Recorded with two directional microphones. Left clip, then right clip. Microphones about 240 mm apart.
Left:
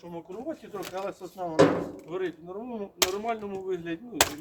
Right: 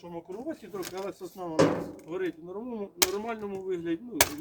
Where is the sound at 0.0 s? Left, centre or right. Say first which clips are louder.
Left 1 dB; centre.